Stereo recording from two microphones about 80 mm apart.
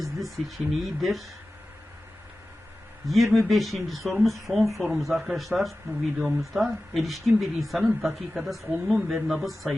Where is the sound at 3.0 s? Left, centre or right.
Centre.